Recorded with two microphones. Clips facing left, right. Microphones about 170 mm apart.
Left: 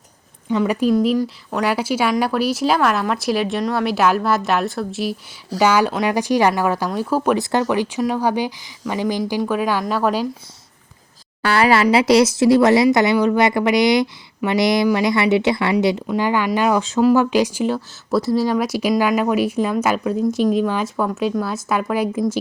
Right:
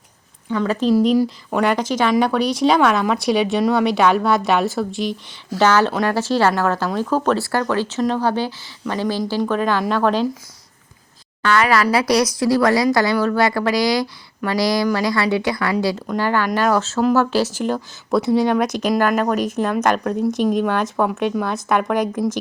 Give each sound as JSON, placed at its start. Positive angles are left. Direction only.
{"t": 0.5, "sound": "speech", "side_deg": 10}
{"t": 1.2, "sound": "speech", "side_deg": -10}
{"t": 1.6, "sound": "speech", "side_deg": 10}
{"t": 11.4, "sound": "speech", "side_deg": 30}